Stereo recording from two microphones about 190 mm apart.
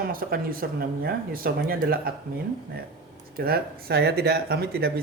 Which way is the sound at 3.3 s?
55° right (ahead or behind).